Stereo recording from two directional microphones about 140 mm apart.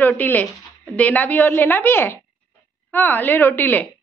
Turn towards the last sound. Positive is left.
turn(degrees=15)  # may be behind; listen again after turning